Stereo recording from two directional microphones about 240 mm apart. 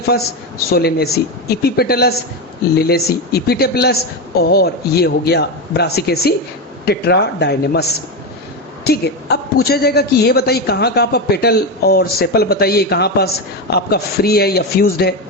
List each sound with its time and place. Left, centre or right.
0.7 s a woman's voice: left